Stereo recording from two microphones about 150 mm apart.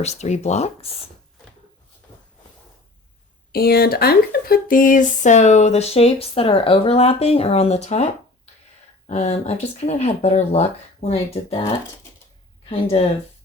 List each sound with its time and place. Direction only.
0.0 s speech: 45° left (ahead or behind)
3.5 s speech: 90° left; by 8.0 s 45° left (ahead or behind)
9.0 s speech: 45° left (ahead or behind)